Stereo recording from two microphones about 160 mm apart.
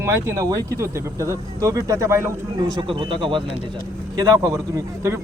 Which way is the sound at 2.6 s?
30° right (ahead or behind).